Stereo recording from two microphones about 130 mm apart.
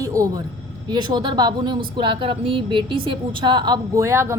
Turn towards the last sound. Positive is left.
turn(degrees=-20)  # may be behind; listen again after turning